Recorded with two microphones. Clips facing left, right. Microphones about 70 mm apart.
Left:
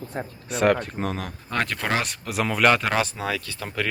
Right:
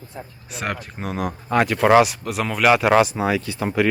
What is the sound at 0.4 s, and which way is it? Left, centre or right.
Speech, centre.